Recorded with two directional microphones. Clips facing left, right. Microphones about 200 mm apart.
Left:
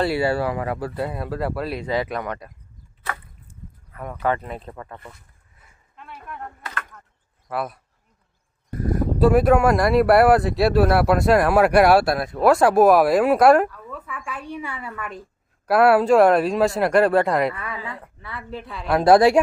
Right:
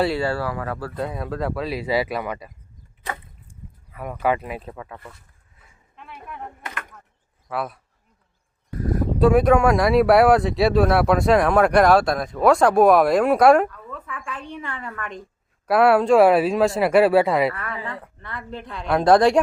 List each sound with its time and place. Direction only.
0.1 s speech: 15° left (ahead or behind)
0.9 s speech: 5° left (ahead or behind)
3.9 s speech: 10° right (ahead or behind)
6.0 s speech: centre (ahead or behind)
6.4 s speech: 20° right (ahead or behind)
7.4 s speech: centre (ahead or behind)
9.0 s speech: centre (ahead or behind)
17.5 s speech: 10° left (ahead or behind)